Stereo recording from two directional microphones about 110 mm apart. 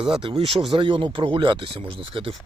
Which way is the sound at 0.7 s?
50° right (ahead or behind).